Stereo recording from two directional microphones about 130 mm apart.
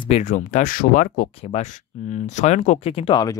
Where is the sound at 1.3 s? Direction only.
50° left (ahead or behind).